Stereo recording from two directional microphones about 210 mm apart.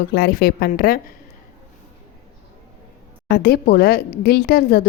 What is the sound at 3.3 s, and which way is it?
A woman's voice, 45° left (ahead or behind).